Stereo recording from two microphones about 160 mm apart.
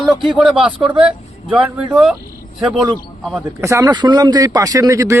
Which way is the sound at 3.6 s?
20° right (ahead or behind).